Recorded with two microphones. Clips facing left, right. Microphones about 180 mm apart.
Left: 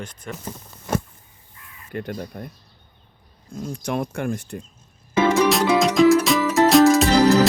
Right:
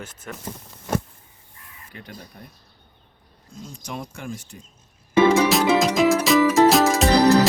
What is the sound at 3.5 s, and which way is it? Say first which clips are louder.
Speech: left 8 dB; 55° left (ahead or behind).